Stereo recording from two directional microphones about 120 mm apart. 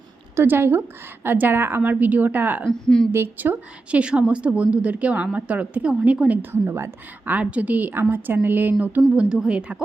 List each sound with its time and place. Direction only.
0.3 s speech: 20° right (ahead or behind)
2.6 s a woman's voice: 5° left (ahead or behind)
3.1 s speech: 15° right (ahead or behind)